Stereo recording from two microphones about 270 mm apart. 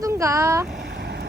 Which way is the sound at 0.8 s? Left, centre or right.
Right.